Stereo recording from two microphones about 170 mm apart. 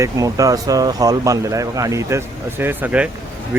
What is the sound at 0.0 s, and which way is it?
Speech, 20° right (ahead or behind).